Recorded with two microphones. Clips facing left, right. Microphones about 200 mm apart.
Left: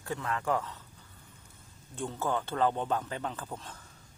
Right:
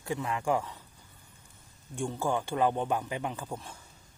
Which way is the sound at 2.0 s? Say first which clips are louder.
Right 2 dB; 15° right (ahead or behind).